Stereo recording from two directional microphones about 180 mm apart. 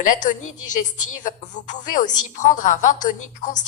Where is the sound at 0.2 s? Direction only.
45° left (ahead or behind).